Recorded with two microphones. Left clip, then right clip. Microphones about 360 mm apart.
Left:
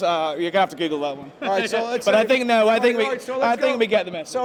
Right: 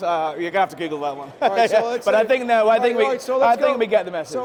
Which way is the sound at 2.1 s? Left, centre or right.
Right.